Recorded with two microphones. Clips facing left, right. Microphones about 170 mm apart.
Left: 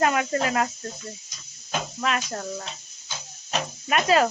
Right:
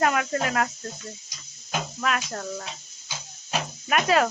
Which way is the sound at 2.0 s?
5° left (ahead or behind).